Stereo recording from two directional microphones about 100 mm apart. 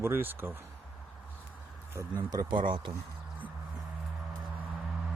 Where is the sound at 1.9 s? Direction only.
30° right (ahead or behind).